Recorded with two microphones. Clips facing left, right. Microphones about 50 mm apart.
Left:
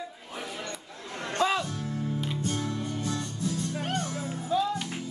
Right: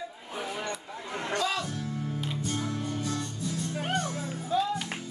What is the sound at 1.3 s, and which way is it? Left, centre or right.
Music, left.